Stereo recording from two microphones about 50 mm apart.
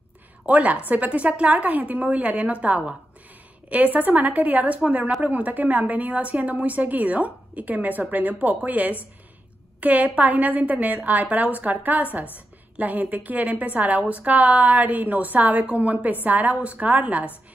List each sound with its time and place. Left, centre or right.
0.5 s a woman's voice: right